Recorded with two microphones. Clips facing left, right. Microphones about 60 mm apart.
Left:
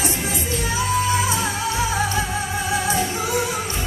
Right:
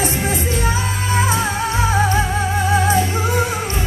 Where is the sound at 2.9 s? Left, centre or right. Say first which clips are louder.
Right 4 dB; right.